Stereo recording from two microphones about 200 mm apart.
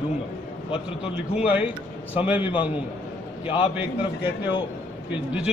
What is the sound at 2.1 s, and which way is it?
Speech, 10° right (ahead or behind).